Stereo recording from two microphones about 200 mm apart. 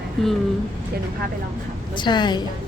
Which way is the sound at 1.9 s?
20° left (ahead or behind).